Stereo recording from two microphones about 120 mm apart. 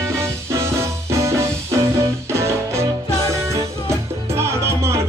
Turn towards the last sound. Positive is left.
turn(degrees=-25)  # may be behind; listen again after turning